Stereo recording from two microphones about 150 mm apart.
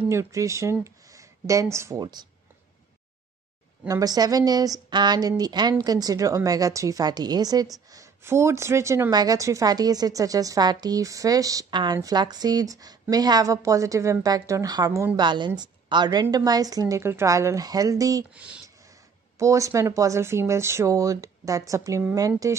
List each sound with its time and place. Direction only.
0.1 s speech: 20° right (ahead or behind)
3.8 s speech: 25° right (ahead or behind)
18.3 s speech: 10° right (ahead or behind)
19.3 s speech: 20° right (ahead or behind)